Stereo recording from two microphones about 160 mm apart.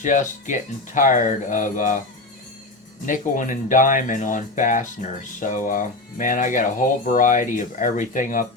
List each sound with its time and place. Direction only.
0.0 s speech: 50° left (ahead or behind)
3.1 s speech: 55° left (ahead or behind)